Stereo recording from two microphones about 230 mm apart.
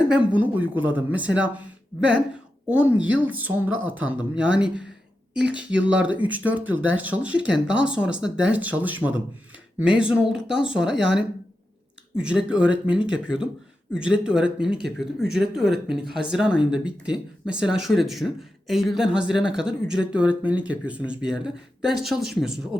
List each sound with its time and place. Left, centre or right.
0.1 s speech: centre
2.6 s speech: centre